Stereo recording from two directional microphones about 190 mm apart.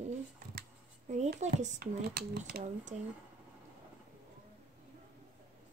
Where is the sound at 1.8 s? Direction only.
55° right (ahead or behind).